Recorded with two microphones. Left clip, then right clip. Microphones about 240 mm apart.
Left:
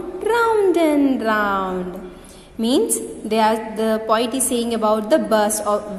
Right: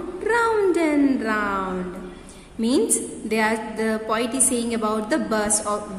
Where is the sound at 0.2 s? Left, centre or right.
Centre.